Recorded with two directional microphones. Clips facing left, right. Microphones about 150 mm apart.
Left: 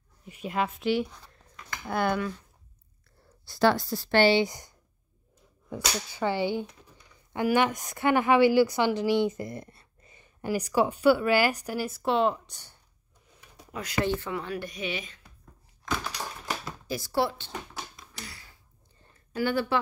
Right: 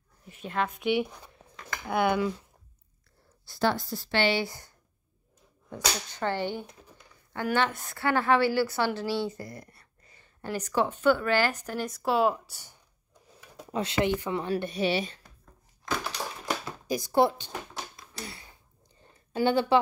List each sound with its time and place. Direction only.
0.3 s a woman's voice: 10° left (ahead or behind)
1.2 s cutlery: 10° right (ahead or behind)
1.9 s speech: 10° right (ahead or behind)
3.4 s speech: 90° left
4.3 s a woman's voice: 20° left (ahead or behind); by 12.7 s 10° right (ahead or behind)
13.7 s speech: 25° right (ahead or behind)
16.8 s speech: 20° right (ahead or behind)
18.2 s a sound: 25° right (ahead or behind)
19.3 s speech: 20° right (ahead or behind)